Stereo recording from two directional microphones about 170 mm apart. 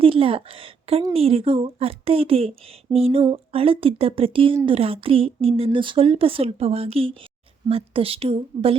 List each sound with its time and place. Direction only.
0.0 s a woman's voice: 30° right (ahead or behind)